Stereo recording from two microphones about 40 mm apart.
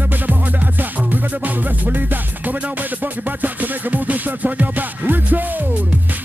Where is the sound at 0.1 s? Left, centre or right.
Right.